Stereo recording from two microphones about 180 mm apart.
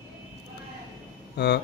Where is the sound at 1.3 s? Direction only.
65° left (ahead or behind).